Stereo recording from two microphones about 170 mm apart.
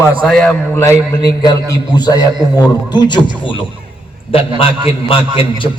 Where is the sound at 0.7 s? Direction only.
15° left (ahead or behind).